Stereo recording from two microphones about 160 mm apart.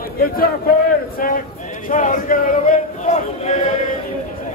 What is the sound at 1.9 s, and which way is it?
Speech, 55° left (ahead or behind).